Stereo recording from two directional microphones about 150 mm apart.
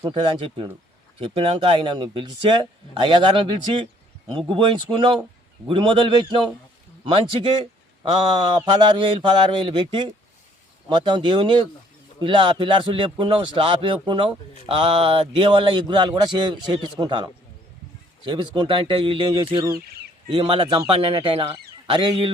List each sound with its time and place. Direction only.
0.0 s a man's voice: 35° right (ahead or behind)